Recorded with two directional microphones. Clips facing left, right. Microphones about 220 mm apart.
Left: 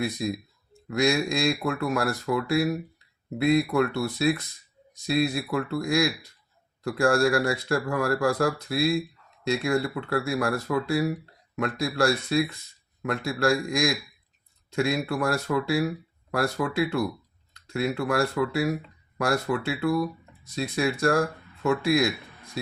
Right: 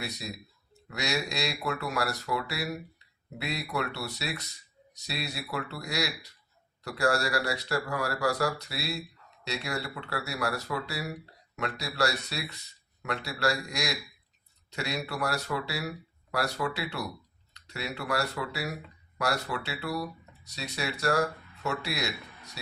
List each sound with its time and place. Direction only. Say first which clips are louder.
0.0 s speech: left 10 dB; 50° left (ahead or behind)